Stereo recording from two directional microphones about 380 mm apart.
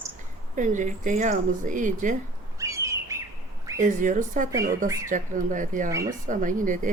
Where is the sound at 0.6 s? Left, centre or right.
Centre.